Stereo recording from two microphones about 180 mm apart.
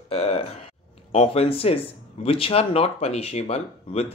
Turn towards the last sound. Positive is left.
turn(degrees=35)  # may be behind; listen again after turning